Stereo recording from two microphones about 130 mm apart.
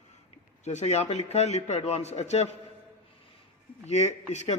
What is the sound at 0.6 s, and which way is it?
Speech, 60° left (ahead or behind).